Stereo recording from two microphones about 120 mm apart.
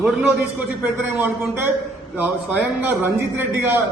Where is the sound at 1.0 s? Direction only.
15° right (ahead or behind).